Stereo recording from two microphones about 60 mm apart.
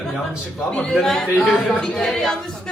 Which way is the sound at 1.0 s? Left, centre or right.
Centre.